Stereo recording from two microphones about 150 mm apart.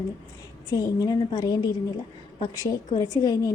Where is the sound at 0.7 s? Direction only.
25° left (ahead or behind).